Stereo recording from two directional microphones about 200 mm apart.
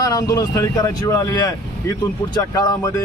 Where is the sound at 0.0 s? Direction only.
15° left (ahead or behind).